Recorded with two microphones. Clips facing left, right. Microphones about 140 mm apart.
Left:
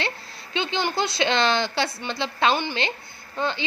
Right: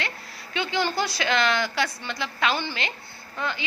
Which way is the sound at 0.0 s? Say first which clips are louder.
Left 4 dB; 25° left (ahead or behind).